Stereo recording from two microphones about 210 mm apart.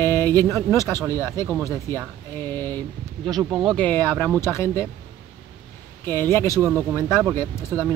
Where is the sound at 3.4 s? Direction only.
20° right (ahead or behind).